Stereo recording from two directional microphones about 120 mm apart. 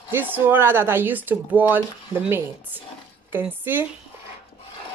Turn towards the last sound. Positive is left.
turn(degrees=-15)  # may be behind; listen again after turning